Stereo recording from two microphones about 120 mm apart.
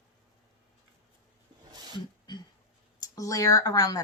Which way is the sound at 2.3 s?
35° left (ahead or behind).